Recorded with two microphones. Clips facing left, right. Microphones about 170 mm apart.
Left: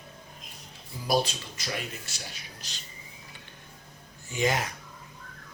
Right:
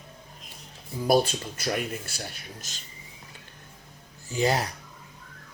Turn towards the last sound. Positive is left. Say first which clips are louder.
# right 3 dB
turn(degrees=-35)  # may be behind; listen again after turning